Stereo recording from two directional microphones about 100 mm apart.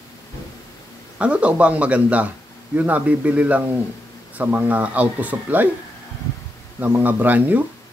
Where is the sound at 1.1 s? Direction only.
10° right (ahead or behind).